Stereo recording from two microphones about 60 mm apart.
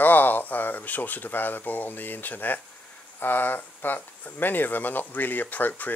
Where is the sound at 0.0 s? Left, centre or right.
Left.